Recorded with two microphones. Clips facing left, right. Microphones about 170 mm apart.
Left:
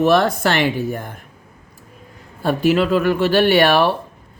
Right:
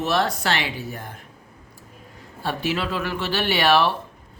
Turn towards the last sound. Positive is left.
turn(degrees=50)  # may be behind; listen again after turning